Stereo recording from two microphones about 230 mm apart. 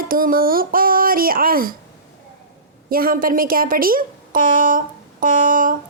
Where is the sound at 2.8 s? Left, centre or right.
Right.